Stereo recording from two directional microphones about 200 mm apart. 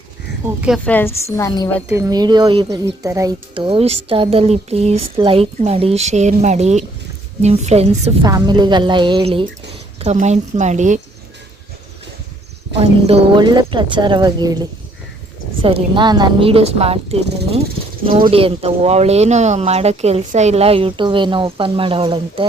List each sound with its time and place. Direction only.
0.9 s a woman's voice: 10° left (ahead or behind)
1.9 s a woman's voice: 15° right (ahead or behind); by 8.1 s 35° right (ahead or behind)
8.2 s a woman's voice: 20° right (ahead or behind); by 11.0 s 35° right (ahead or behind)
12.7 s speech: 30° right (ahead or behind)